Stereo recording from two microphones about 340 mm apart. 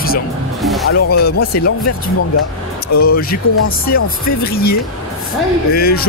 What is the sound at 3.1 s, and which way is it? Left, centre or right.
Speech, left.